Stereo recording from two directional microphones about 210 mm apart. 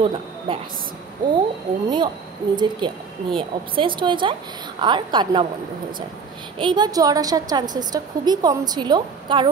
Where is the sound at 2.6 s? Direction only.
20° right (ahead or behind).